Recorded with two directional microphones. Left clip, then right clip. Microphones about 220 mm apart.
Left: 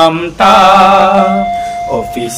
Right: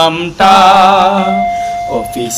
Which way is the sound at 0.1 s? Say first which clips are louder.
Even; 40° right (ahead or behind).